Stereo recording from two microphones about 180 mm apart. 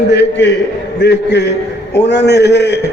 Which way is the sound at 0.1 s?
75° left (ahead or behind).